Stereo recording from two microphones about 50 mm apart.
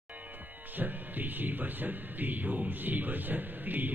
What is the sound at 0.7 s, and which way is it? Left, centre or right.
Music, right.